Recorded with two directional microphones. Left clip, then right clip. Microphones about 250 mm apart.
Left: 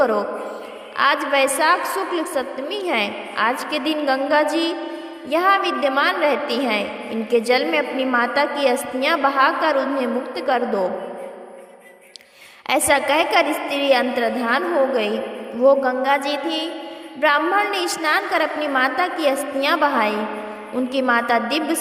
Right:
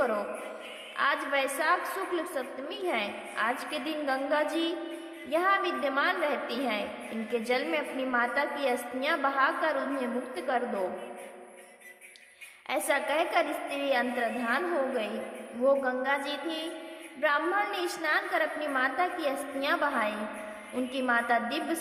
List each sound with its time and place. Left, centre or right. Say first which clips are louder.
0.0 s a woman's voice: left 11 dB; left
12.6 s a woman's voice: left 11 dB; left